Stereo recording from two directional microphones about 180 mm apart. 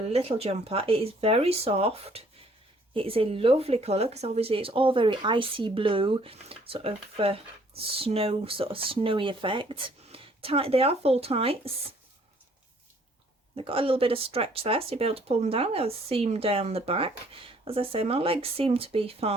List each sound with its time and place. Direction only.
0.1 s speech: 35° right (ahead or behind)
13.6 s speech: 30° right (ahead or behind)